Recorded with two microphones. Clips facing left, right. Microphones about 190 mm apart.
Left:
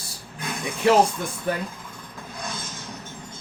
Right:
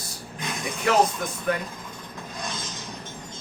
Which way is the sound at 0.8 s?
30° left (ahead or behind).